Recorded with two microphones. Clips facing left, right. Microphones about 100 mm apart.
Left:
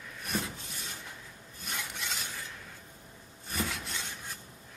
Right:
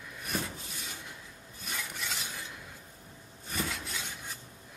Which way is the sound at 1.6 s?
Centre (ahead or behind).